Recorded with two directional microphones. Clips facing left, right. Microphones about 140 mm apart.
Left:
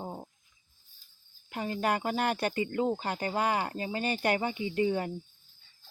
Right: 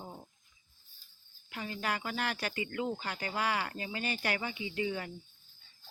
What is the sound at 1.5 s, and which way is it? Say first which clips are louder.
Speech: left 7 dB; 45° left (ahead or behind).